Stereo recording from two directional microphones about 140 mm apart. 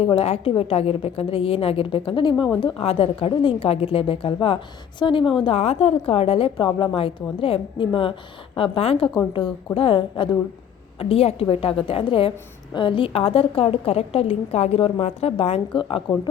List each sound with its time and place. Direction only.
0.0 s a woman's voice: 40° left (ahead or behind)